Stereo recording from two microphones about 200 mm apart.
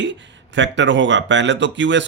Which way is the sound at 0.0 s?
65° right (ahead or behind).